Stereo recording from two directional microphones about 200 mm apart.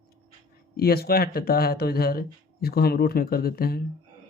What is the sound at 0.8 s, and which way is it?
Speech, 50° left (ahead or behind).